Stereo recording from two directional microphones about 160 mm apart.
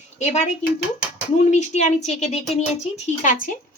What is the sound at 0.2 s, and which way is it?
A woman's voice, 45° left (ahead or behind).